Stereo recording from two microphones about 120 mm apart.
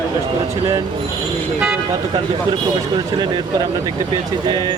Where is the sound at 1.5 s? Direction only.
10° right (ahead or behind).